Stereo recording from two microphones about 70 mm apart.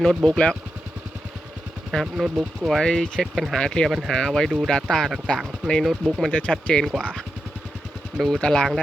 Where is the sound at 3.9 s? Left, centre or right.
Centre.